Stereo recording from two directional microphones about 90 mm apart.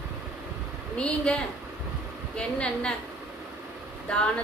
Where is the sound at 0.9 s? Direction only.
10° left (ahead or behind).